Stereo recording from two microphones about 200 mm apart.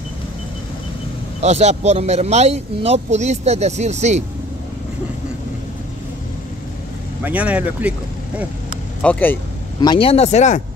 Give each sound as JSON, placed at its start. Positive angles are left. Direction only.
{"t": 1.4, "sound": "a man's voice", "side_deg": -35}
{"t": 7.2, "sound": "speech", "side_deg": -5}
{"t": 9.0, "sound": "speech", "side_deg": 10}
{"t": 9.8, "sound": "speech", "side_deg": 25}